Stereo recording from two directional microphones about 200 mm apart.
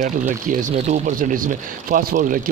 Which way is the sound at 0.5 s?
40° right (ahead or behind).